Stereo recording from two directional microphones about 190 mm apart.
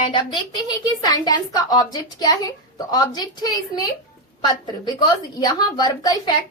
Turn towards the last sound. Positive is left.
turn(degrees=20)  # may be behind; listen again after turning